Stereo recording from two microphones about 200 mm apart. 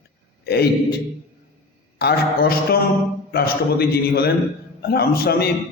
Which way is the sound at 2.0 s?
55° left (ahead or behind).